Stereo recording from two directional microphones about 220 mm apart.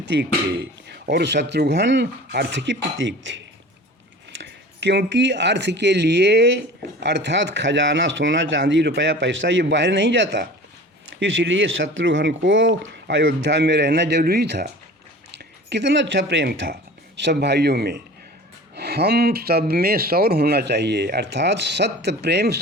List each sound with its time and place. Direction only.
0.1 s speech: 55° right (ahead or behind)